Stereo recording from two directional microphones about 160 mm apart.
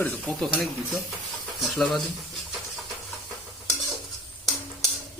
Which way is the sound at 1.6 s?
Centre (ahead or behind).